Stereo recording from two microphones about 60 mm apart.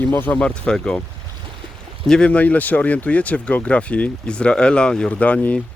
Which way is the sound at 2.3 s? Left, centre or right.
Left.